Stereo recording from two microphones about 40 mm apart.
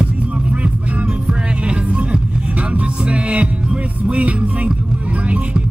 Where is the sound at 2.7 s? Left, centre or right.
Right.